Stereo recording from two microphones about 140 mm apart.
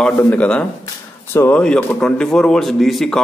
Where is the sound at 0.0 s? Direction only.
10° left (ahead or behind).